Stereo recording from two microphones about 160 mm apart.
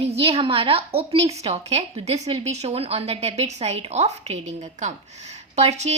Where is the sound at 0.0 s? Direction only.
40° right (ahead or behind).